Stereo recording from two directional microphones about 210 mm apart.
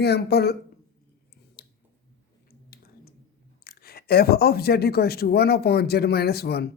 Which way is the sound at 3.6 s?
45° left (ahead or behind).